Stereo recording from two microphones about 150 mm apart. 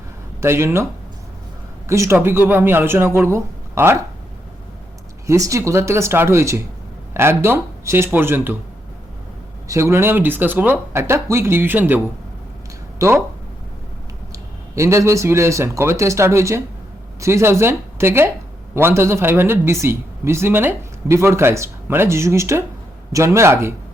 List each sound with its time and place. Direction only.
0.4 s speech: 15° right (ahead or behind)
1.9 s speech: 15° right (ahead or behind)
5.2 s speech: 20° right (ahead or behind)
9.6 s speech: 20° right (ahead or behind)
14.3 s speech: 20° right (ahead or behind)